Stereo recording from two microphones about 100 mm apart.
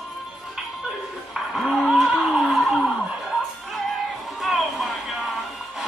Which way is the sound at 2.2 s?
5° right (ahead or behind).